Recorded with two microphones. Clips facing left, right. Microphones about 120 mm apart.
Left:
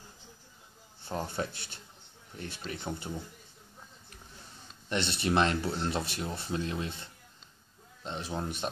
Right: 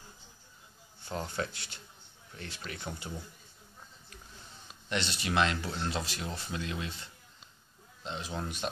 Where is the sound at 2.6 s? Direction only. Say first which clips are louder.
Left 4 dB; 25° left (ahead or behind).